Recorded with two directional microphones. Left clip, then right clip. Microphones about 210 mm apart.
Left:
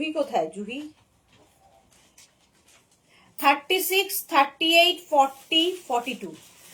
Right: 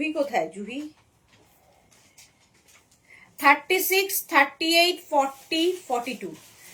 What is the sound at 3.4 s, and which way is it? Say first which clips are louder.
A woman's voice: right 2 dB; 15° right (ahead or behind).